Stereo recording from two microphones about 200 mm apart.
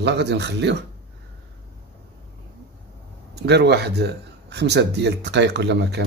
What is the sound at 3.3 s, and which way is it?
Speech, 55° right (ahead or behind).